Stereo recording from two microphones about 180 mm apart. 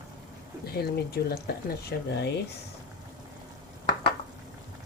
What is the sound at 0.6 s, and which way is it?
Speech, 60° left (ahead or behind).